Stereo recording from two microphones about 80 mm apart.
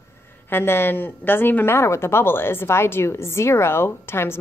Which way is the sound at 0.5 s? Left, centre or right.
Left.